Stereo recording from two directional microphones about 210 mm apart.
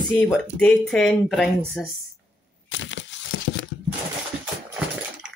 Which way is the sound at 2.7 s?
60° left (ahead or behind).